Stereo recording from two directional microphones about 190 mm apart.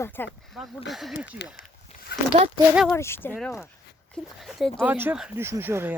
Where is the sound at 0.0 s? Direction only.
10° left (ahead or behind).